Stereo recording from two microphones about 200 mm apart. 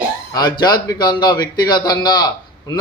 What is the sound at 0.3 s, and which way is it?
A man's voice, 20° left (ahead or behind).